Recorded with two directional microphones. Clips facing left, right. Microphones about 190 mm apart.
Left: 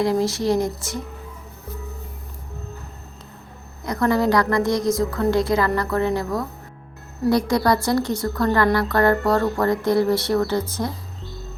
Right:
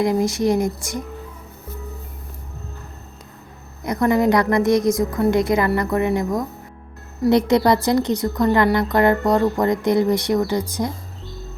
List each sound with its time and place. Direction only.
0.0 s a woman's voice: 15° right (ahead or behind)
3.8 s a woman's voice: 20° right (ahead or behind)